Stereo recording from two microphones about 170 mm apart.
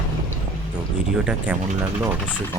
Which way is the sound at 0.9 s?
5° right (ahead or behind).